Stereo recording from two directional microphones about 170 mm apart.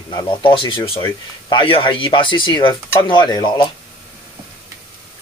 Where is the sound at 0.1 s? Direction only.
25° left (ahead or behind).